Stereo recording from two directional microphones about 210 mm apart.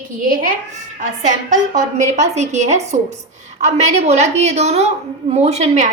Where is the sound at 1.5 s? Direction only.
35° right (ahead or behind).